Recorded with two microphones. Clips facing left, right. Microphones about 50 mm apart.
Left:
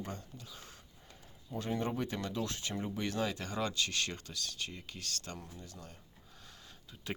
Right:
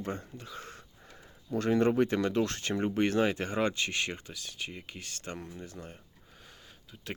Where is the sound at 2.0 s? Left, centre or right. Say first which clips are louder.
Right 9 dB; right.